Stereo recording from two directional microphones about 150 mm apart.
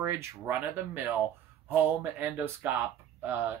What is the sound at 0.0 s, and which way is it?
Speech, 15° right (ahead or behind).